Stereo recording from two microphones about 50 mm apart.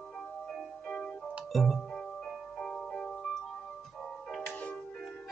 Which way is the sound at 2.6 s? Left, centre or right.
Left.